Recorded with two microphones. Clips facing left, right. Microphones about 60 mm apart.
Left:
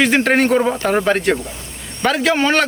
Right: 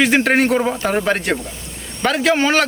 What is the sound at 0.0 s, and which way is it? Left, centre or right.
A man's voice, centre.